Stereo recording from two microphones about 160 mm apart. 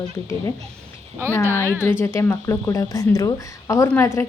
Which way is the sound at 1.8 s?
15° left (ahead or behind).